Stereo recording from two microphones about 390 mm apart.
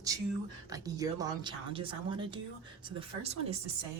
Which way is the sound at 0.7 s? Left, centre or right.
Centre.